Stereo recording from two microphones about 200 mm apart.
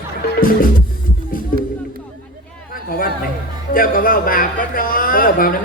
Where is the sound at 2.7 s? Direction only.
45° left (ahead or behind).